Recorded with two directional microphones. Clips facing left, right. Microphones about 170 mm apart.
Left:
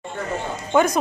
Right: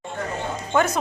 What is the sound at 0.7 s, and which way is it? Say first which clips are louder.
Speech: left 3 dB; 15° left (ahead or behind).